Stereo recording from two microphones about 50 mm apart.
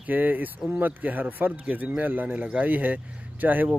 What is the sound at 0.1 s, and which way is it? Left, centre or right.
Speech, right.